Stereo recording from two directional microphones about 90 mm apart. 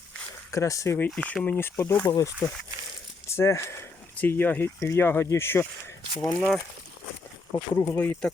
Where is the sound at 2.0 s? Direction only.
40° left (ahead or behind).